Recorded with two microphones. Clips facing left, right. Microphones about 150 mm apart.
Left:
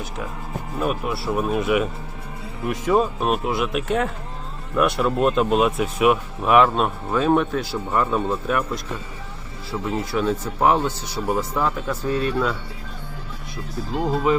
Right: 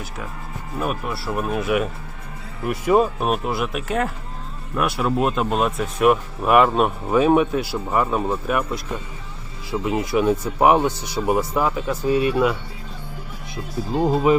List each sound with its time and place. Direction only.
0.8 s speech: centre (ahead or behind)
13.9 s speech: 20° right (ahead or behind)